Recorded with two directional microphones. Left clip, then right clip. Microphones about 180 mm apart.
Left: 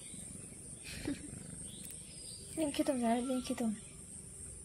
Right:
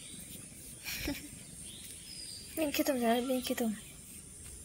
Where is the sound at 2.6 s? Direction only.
20° right (ahead or behind).